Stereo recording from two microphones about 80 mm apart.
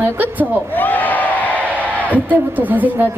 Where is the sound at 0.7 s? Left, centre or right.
Left.